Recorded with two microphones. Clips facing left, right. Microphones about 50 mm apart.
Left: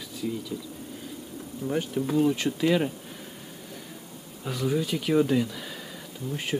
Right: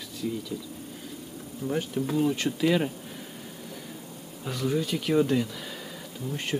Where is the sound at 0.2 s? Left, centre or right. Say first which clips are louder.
Even; centre.